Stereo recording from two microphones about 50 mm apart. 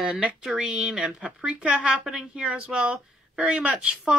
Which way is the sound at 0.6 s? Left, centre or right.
Centre.